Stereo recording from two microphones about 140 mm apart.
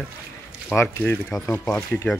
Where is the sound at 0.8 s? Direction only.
15° left (ahead or behind).